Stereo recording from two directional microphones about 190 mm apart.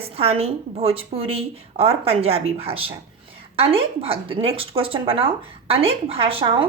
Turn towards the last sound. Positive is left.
turn(degrees=-30)  # may be behind; listen again after turning